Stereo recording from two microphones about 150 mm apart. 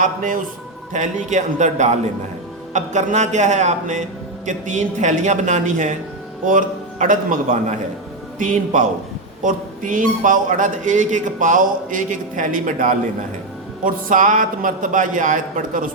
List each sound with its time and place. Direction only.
0.0 s a man's voice: 60° right (ahead or behind)